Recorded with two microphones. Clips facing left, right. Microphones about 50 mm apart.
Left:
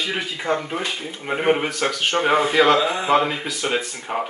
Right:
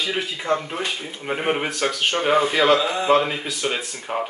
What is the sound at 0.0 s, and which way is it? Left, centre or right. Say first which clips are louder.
Speech: even; centre.